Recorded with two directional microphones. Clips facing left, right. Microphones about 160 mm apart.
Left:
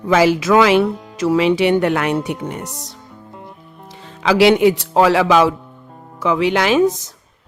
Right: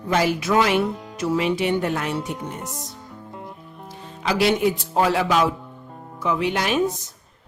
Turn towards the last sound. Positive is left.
turn(degrees=90)